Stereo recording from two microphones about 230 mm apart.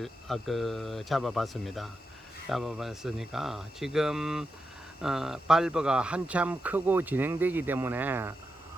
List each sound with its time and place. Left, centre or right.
0.0 s speech: centre